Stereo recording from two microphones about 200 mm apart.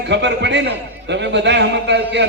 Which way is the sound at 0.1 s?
60° right (ahead or behind).